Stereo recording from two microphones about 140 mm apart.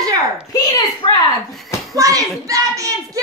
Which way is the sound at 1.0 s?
35° left (ahead or behind).